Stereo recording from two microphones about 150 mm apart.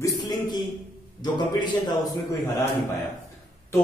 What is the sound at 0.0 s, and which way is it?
A man's voice, 25° left (ahead or behind).